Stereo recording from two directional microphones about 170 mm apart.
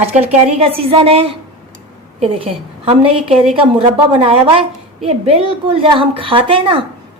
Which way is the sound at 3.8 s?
35° right (ahead or behind).